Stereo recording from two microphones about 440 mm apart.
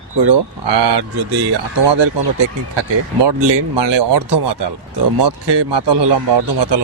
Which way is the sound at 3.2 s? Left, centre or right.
Right.